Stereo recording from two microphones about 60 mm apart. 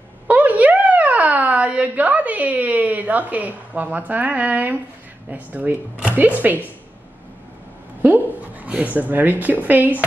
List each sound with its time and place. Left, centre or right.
0.3 s a sound: right
5.3 s speech: right
8.0 s speech: right